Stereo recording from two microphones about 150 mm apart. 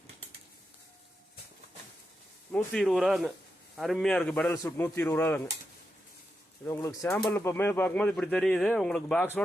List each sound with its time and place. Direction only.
2.5 s speech: 5° left (ahead or behind)
4.5 s speech: 20° left (ahead or behind)
6.7 s speech: 20° left (ahead or behind)